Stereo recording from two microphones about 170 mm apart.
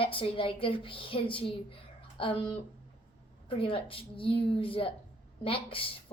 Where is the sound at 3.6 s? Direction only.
30° left (ahead or behind).